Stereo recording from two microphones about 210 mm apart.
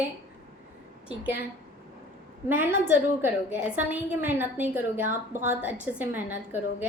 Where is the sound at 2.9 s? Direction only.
10° right (ahead or behind).